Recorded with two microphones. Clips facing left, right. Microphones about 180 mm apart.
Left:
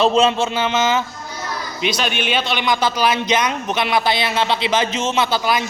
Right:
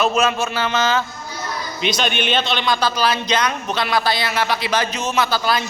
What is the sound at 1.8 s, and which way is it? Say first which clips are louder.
A man's voice: even; 5° left (ahead or behind).